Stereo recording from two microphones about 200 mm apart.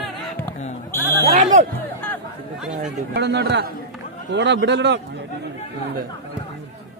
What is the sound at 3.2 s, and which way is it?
A man's voice, 55° right (ahead or behind).